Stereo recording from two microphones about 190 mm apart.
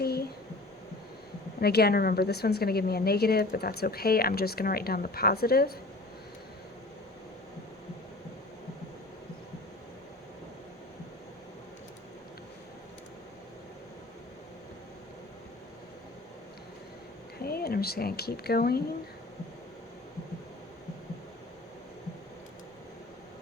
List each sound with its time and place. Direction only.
0.0 s a sound: 55° left (ahead or behind)
1.6 s a woman's voice: 55° left (ahead or behind)
17.4 s speech: 55° left (ahead or behind)